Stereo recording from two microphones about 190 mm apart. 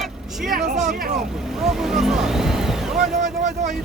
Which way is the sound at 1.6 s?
Centre (ahead or behind).